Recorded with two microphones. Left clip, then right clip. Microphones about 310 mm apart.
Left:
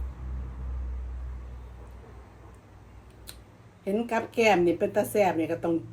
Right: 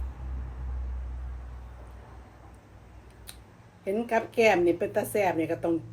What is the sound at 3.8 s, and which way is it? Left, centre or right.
Speech, centre.